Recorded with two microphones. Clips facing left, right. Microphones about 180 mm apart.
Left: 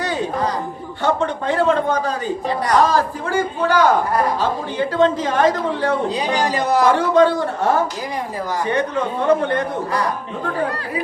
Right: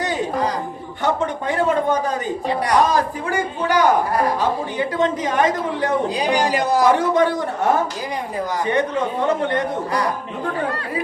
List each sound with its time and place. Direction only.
0.0 s a sound: 20° right (ahead or behind)
1.0 s a woman's voice: 15° right (ahead or behind)
4.9 s a woman's voice: 15° right (ahead or behind)
9.2 s a man's voice: 20° right (ahead or behind)